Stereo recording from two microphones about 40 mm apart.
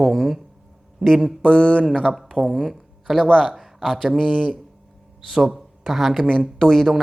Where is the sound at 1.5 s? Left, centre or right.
Left.